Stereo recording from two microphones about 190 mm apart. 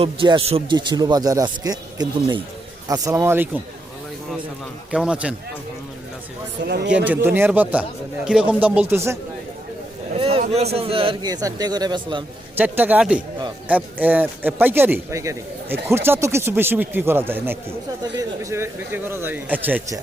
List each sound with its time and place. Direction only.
0.0 s speech: 30° right (ahead or behind); by 3.6 s 10° right (ahead or behind)
4.9 s a man's voice: 5° right (ahead or behind)
6.7 s speech: 60° right (ahead or behind)
6.9 s speech: 10° right (ahead or behind)
10.2 s a sound: 30° right (ahead or behind)
10.5 s speech: 35° right (ahead or behind)
12.5 s speech: 10° right (ahead or behind)